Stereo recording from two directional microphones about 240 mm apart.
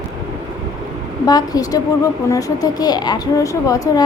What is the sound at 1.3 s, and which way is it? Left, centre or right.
A woman's voice, centre.